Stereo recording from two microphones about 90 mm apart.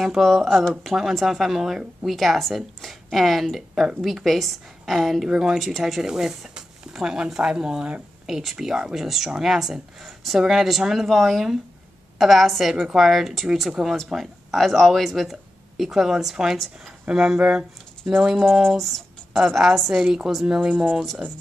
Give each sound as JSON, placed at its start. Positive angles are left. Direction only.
{"t": 0.0, "sound": "a woman's voice", "side_deg": 0}
{"t": 18.8, "sound": "a woman's voice", "side_deg": 5}